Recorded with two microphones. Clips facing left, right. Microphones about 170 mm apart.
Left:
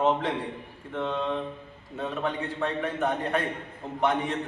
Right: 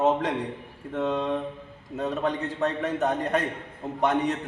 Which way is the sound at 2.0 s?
40° right (ahead or behind).